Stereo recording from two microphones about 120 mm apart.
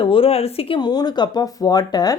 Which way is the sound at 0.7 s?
35° left (ahead or behind).